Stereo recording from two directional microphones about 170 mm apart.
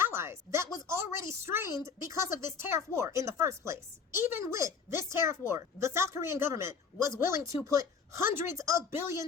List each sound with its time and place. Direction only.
0.0 s speech: 15° right (ahead or behind)